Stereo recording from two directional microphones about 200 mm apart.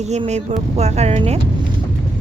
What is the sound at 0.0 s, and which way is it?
Speech, 35° right (ahead or behind).